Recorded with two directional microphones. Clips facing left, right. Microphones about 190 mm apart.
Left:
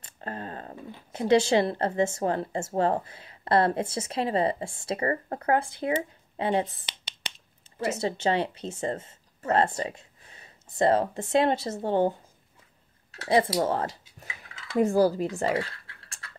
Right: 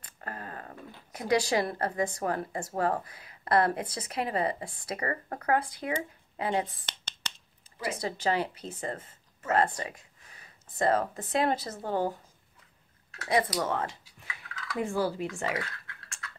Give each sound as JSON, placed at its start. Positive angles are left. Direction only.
{"t": 0.0, "sound": "speech", "side_deg": 25}
{"t": 8.0, "sound": "a woman's voice", "side_deg": 25}
{"t": 13.1, "sound": "speech", "side_deg": 30}
{"t": 14.0, "sound": "a sound", "side_deg": 25}
{"t": 14.8, "sound": "speech", "side_deg": 40}